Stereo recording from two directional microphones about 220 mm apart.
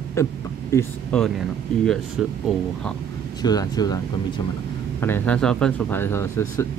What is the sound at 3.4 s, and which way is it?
Speech, 15° left (ahead or behind).